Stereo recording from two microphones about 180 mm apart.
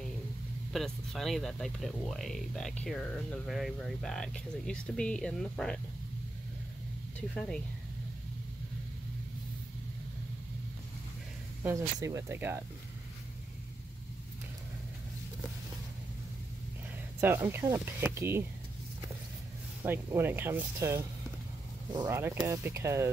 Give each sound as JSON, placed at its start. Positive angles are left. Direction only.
{"t": 0.7, "sound": "speech", "side_deg": 0}
{"t": 7.2, "sound": "speech", "side_deg": 5}
{"t": 11.6, "sound": "speech", "side_deg": -15}
{"t": 17.2, "sound": "speech", "side_deg": -10}
{"t": 19.8, "sound": "speech", "side_deg": -10}